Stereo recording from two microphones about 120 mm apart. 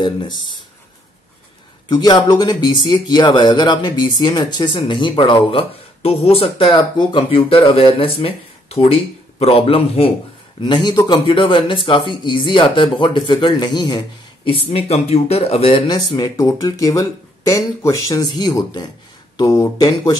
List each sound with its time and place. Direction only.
0.0 s speech: 40° left (ahead or behind)
1.9 s speech: 35° left (ahead or behind); by 10.1 s 55° left (ahead or behind)
10.6 s speech: 35° left (ahead or behind); by 15.8 s 55° left (ahead or behind)
15.9 s speech: 35° left (ahead or behind)